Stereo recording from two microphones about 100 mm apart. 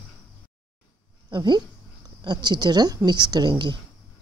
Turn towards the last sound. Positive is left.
turn(degrees=-50)  # may be behind; listen again after turning